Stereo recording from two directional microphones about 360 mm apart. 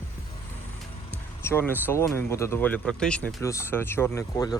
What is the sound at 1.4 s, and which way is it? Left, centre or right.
Speech, centre.